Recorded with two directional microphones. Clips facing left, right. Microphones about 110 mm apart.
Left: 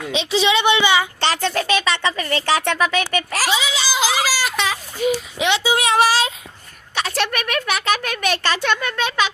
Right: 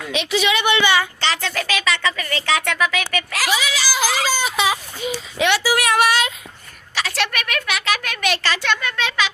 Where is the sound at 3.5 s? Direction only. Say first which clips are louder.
Right 2 dB; 25° left (ahead or behind).